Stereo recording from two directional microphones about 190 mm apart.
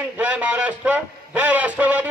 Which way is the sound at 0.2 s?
5° right (ahead or behind).